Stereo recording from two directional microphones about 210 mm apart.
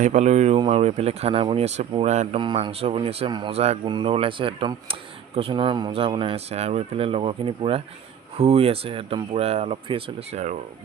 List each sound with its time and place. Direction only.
0.0 s speech: 35° right (ahead or behind)